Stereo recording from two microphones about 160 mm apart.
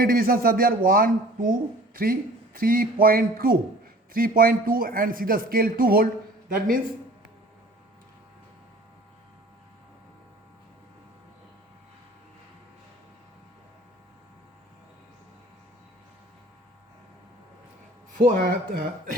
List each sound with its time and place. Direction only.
0.0 s speech: 65° right (ahead or behind)
18.1 s speech: 55° right (ahead or behind)